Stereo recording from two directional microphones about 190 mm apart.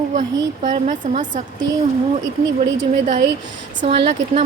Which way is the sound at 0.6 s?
45° right (ahead or behind).